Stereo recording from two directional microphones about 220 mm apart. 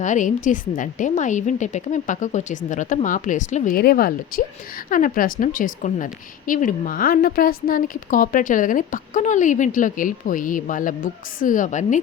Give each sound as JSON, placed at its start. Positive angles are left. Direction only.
{"t": 0.0, "sound": "a woman's voice", "side_deg": 35}